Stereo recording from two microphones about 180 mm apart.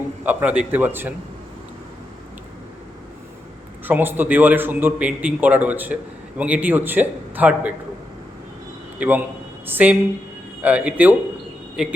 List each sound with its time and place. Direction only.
0.3 s a man's voice: 10° right (ahead or behind)
3.8 s a man's voice: 10° right (ahead or behind)
9.0 s a man's voice: 10° right (ahead or behind)